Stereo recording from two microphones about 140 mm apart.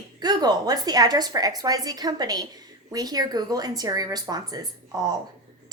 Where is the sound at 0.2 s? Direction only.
30° right (ahead or behind).